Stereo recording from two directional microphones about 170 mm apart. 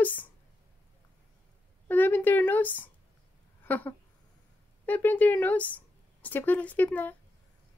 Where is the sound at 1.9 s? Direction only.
10° left (ahead or behind).